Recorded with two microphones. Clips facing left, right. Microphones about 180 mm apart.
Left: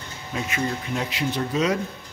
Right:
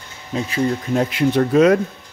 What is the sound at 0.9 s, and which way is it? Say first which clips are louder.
Speech: right 9 dB; 50° right (ahead or behind).